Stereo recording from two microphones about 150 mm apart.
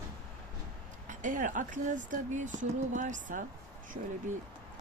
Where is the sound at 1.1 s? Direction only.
60° right (ahead or behind).